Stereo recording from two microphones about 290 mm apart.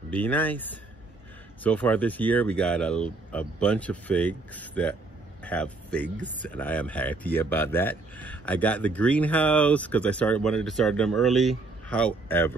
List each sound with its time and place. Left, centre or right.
0.1 s speech: centre
6.0 s speech: right
6.4 s speech: centre